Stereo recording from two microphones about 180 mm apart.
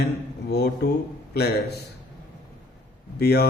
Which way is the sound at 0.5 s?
65° left (ahead or behind).